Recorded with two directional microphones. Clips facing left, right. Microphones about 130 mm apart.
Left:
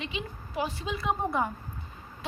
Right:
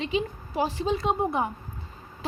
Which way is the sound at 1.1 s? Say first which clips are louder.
Left 2 dB; 20° right (ahead or behind).